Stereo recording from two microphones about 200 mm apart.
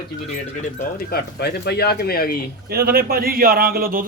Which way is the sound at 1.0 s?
50° left (ahead or behind).